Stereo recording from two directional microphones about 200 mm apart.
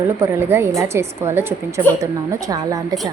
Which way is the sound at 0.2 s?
10° right (ahead or behind).